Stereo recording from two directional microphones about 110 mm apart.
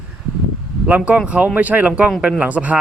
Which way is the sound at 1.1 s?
10° right (ahead or behind).